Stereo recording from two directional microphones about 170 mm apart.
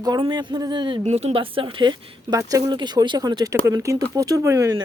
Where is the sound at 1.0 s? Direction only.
40° right (ahead or behind).